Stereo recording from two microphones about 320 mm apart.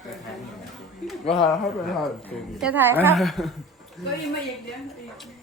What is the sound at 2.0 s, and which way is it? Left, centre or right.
Speech, centre.